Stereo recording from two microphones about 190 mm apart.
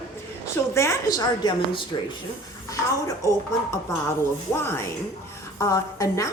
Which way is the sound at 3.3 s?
15° left (ahead or behind).